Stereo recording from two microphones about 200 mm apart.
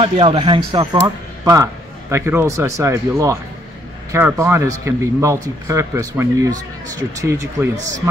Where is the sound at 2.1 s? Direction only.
10° right (ahead or behind).